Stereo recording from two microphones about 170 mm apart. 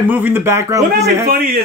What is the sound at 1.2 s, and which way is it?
Speech, 60° right (ahead or behind).